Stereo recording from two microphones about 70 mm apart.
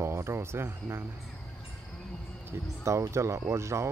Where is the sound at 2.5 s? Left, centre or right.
Right.